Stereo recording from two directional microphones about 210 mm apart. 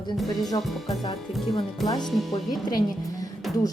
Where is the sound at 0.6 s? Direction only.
Centre (ahead or behind).